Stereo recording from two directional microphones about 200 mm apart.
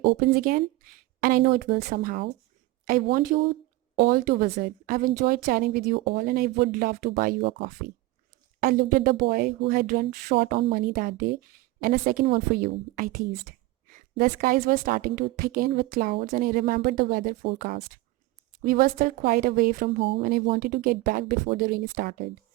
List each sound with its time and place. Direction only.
0.2 s speech: 45° right (ahead or behind)